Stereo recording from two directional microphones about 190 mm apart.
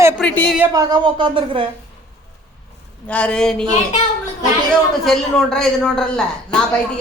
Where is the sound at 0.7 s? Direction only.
20° right (ahead or behind).